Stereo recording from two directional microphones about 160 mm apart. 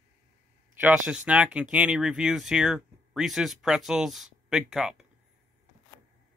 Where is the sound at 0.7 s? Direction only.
10° right (ahead or behind).